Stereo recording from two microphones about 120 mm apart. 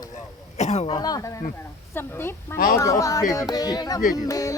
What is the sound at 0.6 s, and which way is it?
Speech, 60° left (ahead or behind).